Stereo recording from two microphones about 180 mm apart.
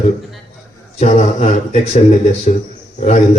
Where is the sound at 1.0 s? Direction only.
35° left (ahead or behind).